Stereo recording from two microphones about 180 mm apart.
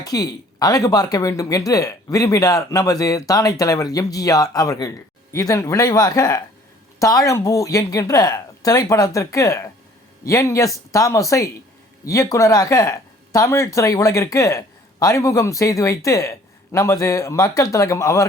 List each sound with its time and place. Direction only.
0.0 s speech: 20° left (ahead or behind)